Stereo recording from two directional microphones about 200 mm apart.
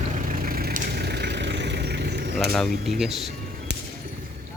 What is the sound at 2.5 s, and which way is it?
Speech, centre (ahead or behind).